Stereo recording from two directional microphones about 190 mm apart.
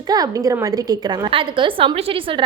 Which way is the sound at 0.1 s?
20° right (ahead or behind).